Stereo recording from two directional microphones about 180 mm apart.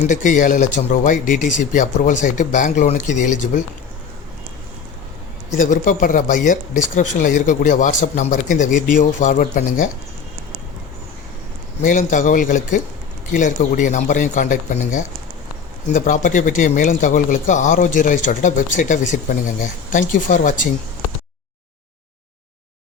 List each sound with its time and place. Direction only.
0.1 s speech: 45° left (ahead or behind)
5.5 s speech: 45° left (ahead or behind)
11.8 s speech: 45° left (ahead or behind)